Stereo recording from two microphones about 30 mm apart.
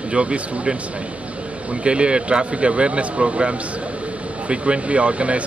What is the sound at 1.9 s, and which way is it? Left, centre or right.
A man's voice, right.